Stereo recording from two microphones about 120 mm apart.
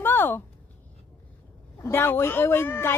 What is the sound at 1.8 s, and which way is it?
Speech, 20° left (ahead or behind).